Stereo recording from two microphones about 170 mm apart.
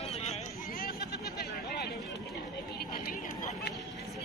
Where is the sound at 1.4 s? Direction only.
70° left (ahead or behind).